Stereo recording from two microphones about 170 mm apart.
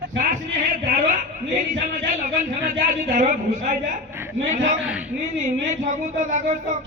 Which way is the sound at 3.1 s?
50° right (ahead or behind).